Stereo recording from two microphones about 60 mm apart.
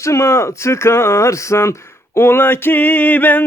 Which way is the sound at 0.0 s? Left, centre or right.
Left.